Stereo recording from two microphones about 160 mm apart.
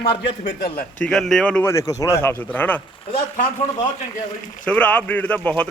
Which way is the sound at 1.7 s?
20° left (ahead or behind).